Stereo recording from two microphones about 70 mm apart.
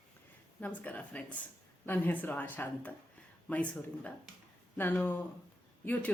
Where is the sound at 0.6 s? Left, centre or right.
Left.